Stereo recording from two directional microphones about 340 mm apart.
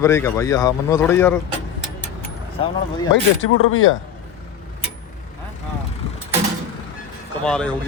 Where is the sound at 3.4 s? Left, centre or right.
Left.